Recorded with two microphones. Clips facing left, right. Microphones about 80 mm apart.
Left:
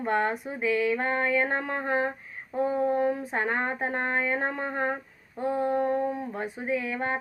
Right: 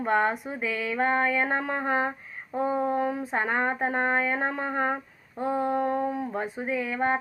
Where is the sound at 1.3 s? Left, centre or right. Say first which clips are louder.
Even; centre.